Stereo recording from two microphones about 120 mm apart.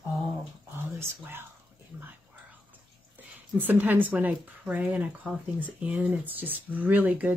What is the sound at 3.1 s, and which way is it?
A woman's voice, 15° right (ahead or behind).